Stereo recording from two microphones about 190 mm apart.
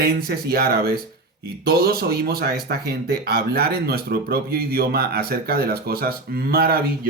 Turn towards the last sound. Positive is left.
turn(degrees=-55)  # may be behind; listen again after turning